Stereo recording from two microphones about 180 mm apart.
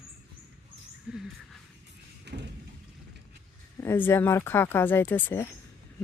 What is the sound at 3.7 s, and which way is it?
Speech, 15° left (ahead or behind).